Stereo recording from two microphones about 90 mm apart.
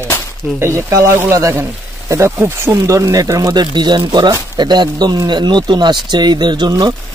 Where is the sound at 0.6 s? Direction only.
35° right (ahead or behind).